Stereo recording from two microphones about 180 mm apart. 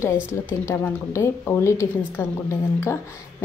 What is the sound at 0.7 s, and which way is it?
Speech, 15° left (ahead or behind).